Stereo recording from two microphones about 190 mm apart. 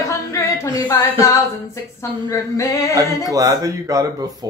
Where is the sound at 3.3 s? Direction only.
20° right (ahead or behind).